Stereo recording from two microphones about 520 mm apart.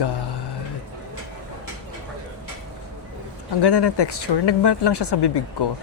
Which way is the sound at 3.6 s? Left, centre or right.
Left.